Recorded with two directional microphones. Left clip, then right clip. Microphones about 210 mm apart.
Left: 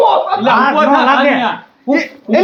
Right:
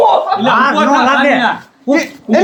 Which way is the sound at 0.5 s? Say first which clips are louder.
Left 1 dB; 15° right (ahead or behind).